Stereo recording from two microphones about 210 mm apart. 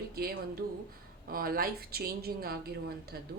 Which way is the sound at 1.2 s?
45° right (ahead or behind).